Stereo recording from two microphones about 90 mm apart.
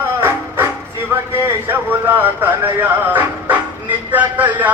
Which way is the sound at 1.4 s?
25° right (ahead or behind).